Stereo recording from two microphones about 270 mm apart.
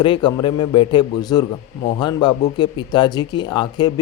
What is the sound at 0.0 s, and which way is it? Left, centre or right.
Speech, centre.